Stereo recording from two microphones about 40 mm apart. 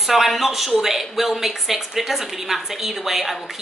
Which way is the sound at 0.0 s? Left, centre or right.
Centre.